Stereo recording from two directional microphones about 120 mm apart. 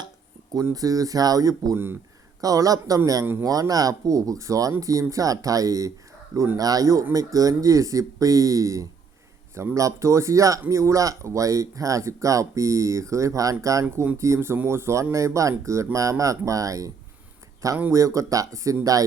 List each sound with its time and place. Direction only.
0.5 s speech: 30° right (ahead or behind)
13.8 s speech: 15° right (ahead or behind)
17.9 s speech: 25° right (ahead or behind)